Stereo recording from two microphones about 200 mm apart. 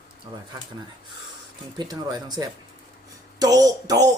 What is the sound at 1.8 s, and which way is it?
Speech, 20° right (ahead or behind).